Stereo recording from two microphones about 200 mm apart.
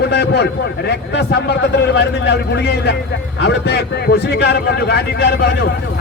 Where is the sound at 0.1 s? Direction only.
55° left (ahead or behind).